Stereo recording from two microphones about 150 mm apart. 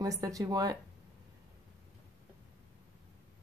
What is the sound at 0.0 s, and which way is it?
Speech, 25° right (ahead or behind).